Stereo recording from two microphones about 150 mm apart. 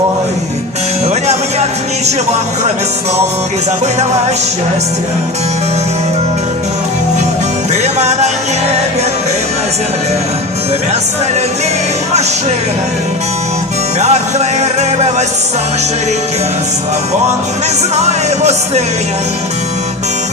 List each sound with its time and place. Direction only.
7.7 s music: 50° right (ahead or behind)
14.0 s music: 50° right (ahead or behind)
18.0 s music: 45° right (ahead or behind)